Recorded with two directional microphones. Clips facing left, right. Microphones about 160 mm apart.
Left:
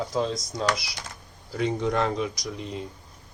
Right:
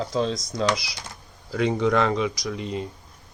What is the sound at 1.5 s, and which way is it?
Speech, 90° right.